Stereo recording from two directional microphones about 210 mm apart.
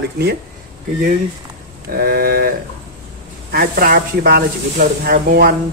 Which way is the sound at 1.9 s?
45° right (ahead or behind).